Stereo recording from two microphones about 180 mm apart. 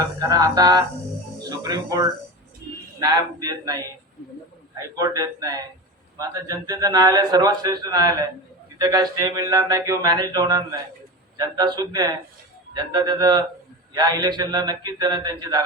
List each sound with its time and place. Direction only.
0.2 s a man's voice: 20° right (ahead or behind)
1.4 s music: 20° right (ahead or behind)
3.0 s a man's voice: 20° right (ahead or behind)